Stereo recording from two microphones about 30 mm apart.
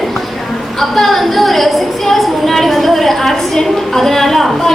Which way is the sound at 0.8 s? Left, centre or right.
Centre.